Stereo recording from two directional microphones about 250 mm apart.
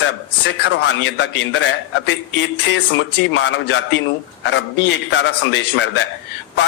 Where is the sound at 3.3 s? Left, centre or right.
Left.